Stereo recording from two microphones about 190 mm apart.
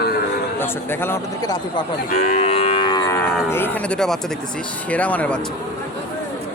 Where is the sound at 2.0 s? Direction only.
50° left (ahead or behind).